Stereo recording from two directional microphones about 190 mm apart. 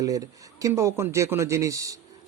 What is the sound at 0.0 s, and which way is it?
A man's voice, 20° right (ahead or behind).